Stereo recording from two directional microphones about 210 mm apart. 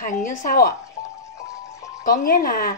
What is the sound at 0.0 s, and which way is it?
Speech, 40° left (ahead or behind).